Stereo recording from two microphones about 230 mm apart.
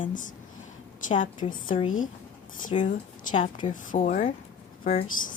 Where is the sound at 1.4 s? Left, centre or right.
Left.